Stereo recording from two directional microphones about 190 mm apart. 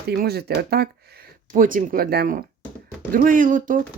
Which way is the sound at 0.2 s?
55° right (ahead or behind).